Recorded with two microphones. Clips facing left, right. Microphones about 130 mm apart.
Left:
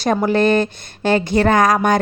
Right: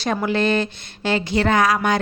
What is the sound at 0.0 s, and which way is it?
A woman's voice, 40° left (ahead or behind).